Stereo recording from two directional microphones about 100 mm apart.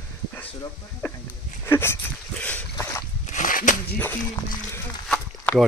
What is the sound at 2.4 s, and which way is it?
Boat, 15° left (ahead or behind).